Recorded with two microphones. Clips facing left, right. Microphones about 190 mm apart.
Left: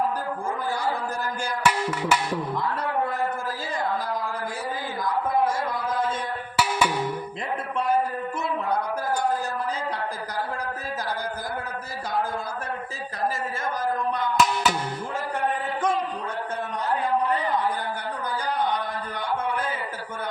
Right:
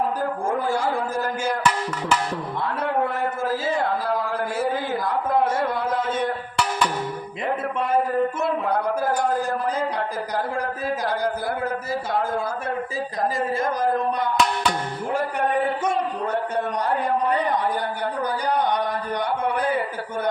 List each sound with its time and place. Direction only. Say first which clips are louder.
0.7 s a man's voice: right 4 dB; 70° right (ahead or behind)
1.6 s music: even; 10° left (ahead or behind)
5.0 s a sound: even; 65° right (ahead or behind)
6.6 s music: left 1 dB; 5° left (ahead or behind)
14.3 s music: even; 5° left (ahead or behind)